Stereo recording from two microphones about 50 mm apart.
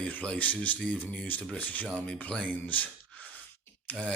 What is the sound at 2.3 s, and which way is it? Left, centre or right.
Speech, left.